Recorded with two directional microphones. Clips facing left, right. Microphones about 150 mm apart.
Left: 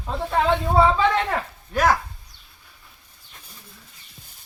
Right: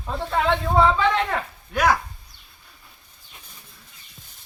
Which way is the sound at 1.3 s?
Centre (ahead or behind).